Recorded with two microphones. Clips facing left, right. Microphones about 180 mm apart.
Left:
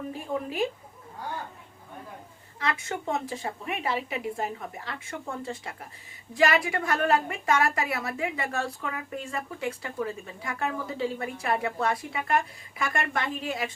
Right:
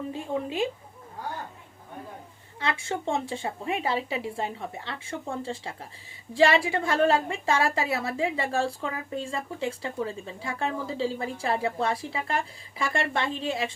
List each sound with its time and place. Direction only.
0.1 s a woman's voice: 25° right (ahead or behind)
2.6 s a woman's voice: 30° right (ahead or behind)